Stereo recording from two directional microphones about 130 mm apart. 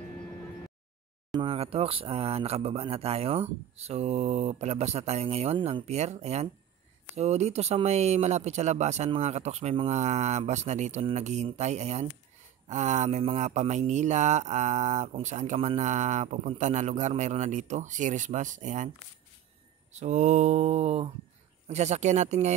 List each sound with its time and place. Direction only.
1.3 s a man's voice: 45° right (ahead or behind); by 18.9 s 70° right (ahead or behind)
19.9 s a man's voice: 60° right (ahead or behind)